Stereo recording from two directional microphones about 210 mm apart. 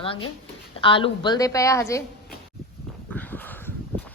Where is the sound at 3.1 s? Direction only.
10° left (ahead or behind).